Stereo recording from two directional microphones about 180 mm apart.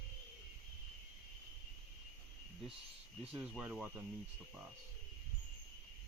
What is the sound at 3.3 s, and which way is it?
Speech, 5° right (ahead or behind).